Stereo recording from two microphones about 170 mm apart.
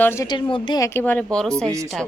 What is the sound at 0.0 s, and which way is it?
Speech, 15° left (ahead or behind).